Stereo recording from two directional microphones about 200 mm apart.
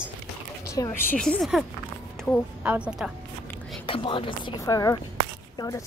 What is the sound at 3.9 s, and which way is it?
Speech, 25° left (ahead or behind).